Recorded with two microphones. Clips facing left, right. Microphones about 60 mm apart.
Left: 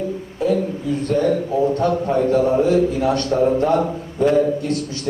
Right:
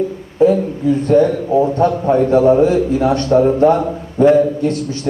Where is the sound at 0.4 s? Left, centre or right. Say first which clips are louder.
Right 8 dB; right.